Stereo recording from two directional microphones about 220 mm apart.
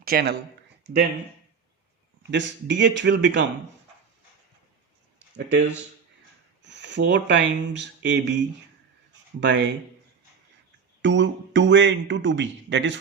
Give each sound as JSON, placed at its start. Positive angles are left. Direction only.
{"t": 0.0, "sound": "speech", "side_deg": -45}
{"t": 2.3, "sound": "speech", "side_deg": -55}
{"t": 6.6, "sound": "speech", "side_deg": -55}
{"t": 11.0, "sound": "speech", "side_deg": -55}